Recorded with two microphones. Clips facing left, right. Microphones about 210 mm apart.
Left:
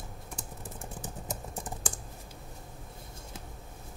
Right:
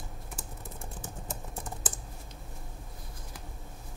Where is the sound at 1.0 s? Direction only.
20° left (ahead or behind).